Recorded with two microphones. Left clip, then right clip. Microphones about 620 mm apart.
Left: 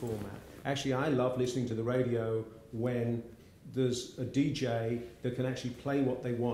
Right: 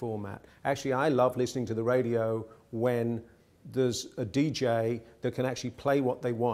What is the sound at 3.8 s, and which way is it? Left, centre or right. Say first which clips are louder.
A man's voice: right 4 dB; right.